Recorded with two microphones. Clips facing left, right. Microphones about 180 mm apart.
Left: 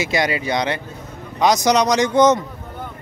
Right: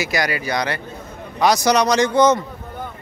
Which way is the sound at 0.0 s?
25° left (ahead or behind).